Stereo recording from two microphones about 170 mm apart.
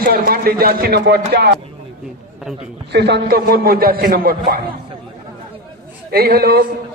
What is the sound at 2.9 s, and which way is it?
A man's voice, 80° right.